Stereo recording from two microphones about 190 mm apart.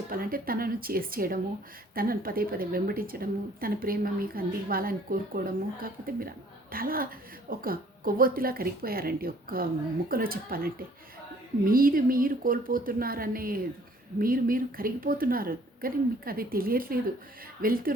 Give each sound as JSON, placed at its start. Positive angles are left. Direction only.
{"t": 0.1, "sound": "speech", "side_deg": -50}